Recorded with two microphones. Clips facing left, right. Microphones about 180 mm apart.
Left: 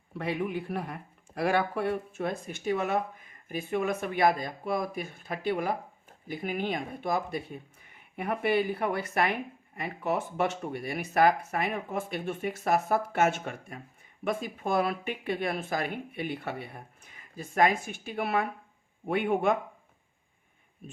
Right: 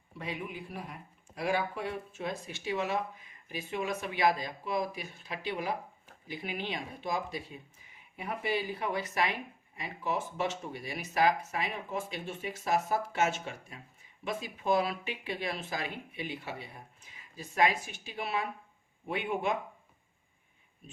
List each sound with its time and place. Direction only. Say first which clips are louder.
0.1 s speech: left 8 dB; 70° left (ahead or behind)